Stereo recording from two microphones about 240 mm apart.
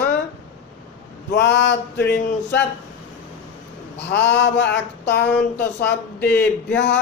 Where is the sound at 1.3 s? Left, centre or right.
Left.